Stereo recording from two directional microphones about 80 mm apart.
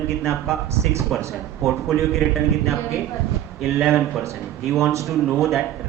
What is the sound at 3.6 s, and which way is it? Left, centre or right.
Speech, centre.